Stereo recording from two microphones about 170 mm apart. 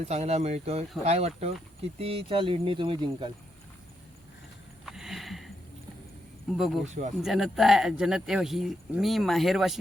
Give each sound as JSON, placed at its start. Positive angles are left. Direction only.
{"t": 0.1, "sound": "speech", "side_deg": -40}
{"t": 4.9, "sound": "a sound", "side_deg": 0}
{"t": 6.5, "sound": "speech", "side_deg": 0}